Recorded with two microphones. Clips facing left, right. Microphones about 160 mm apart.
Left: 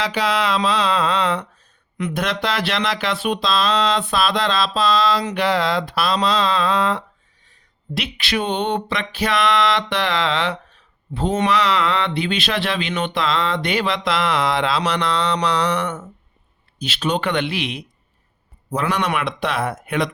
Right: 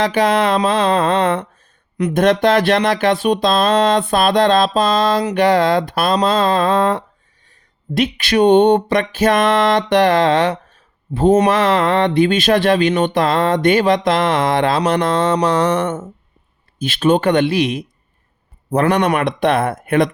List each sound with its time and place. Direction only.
0.0 s speech: 50° right (ahead or behind)